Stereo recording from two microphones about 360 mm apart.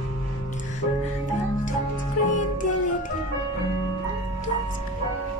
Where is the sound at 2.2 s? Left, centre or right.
Left.